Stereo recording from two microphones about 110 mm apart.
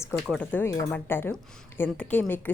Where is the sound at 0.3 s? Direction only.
15° left (ahead or behind).